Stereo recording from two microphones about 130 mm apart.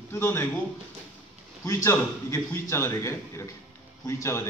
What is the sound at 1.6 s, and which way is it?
A man's voice, 20° left (ahead or behind).